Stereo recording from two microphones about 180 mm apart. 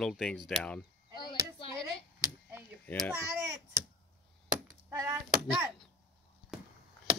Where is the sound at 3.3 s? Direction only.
15° right (ahead or behind).